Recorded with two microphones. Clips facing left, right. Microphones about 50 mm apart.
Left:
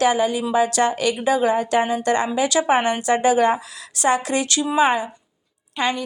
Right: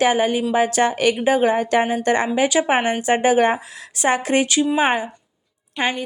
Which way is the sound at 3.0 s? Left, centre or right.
Right.